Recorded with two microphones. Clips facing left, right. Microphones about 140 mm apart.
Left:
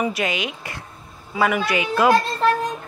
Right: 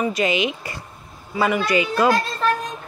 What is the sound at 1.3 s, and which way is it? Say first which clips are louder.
Speech: right 1 dB; 5° left (ahead or behind).